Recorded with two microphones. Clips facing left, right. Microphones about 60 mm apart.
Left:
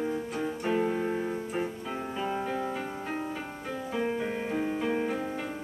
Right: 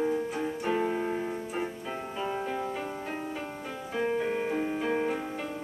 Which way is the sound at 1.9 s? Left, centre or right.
Centre.